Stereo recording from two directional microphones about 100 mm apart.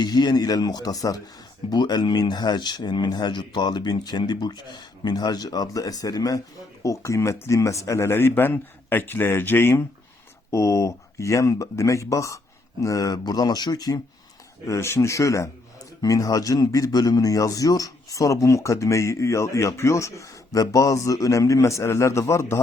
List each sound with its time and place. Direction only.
0.0 s speech: 45° left (ahead or behind)
14.7 s speech: 25° left (ahead or behind)